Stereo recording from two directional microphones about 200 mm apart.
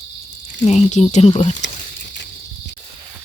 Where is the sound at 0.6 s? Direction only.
35° left (ahead or behind).